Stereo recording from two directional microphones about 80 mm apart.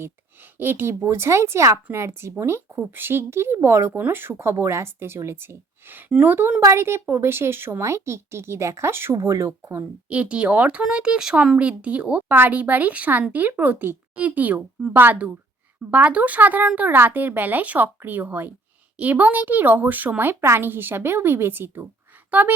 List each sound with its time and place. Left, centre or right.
0.6 s speech: right
6.1 s speech: centre
6.6 s speech: right
10.1 s speech: centre